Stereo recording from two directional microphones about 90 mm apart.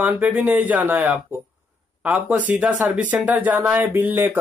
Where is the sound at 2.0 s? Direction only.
15° right (ahead or behind).